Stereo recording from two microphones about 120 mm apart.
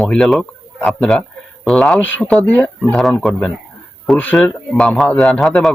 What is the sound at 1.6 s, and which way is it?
Speech, 5° left (ahead or behind).